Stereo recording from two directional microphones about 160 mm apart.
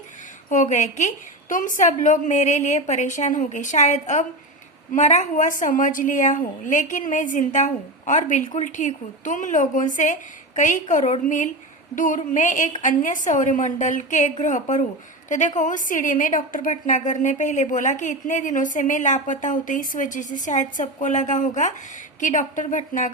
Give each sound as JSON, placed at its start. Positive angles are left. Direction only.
{"t": 0.5, "sound": "a woman's voice", "side_deg": 50}